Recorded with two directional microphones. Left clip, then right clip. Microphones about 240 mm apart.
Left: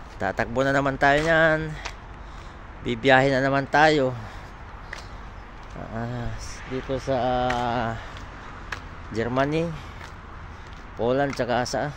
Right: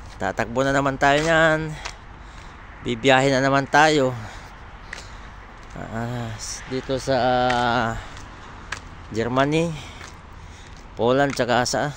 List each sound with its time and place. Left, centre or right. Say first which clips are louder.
0.2 s speech: right 1 dB; centre
5.9 s speech: right 3 dB; centre
9.1 s speech: right 3 dB; centre
11.0 s speech: right 4 dB; centre